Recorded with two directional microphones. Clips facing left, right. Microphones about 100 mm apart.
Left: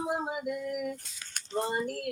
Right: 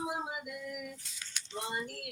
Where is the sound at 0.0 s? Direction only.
45° left (ahead or behind).